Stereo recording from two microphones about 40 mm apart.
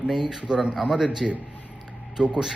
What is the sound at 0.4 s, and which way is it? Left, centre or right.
Speech, right.